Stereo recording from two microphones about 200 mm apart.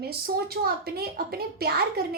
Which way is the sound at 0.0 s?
50° right (ahead or behind).